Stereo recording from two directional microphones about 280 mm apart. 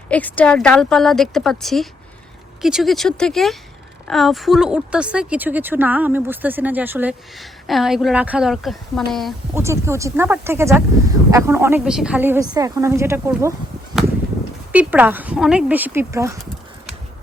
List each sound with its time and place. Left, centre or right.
0.1 s speech: centre
9.6 s speech: centre
14.7 s speech: centre